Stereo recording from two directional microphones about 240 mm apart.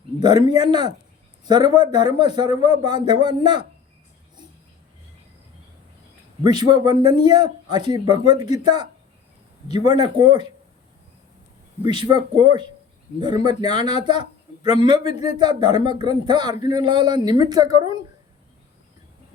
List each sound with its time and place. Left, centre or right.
0.4 s a man's voice: centre
6.4 s a man's voice: centre
11.8 s a man's voice: centre